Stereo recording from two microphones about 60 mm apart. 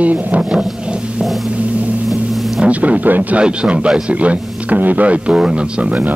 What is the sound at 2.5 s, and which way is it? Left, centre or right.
Speech, right.